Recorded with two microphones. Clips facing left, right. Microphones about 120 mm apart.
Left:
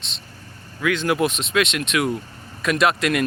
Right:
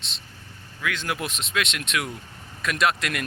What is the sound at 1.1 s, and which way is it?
Speech, 65° left (ahead or behind).